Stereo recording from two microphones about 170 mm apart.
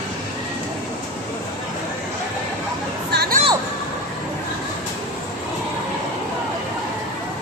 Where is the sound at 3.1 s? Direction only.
65° right (ahead or behind).